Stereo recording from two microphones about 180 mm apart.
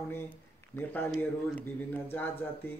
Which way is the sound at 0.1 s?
10° left (ahead or behind).